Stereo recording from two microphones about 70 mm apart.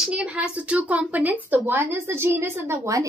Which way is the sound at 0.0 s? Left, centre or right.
Centre.